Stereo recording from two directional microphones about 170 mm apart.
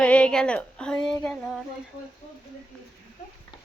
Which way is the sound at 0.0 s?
5° left (ahead or behind).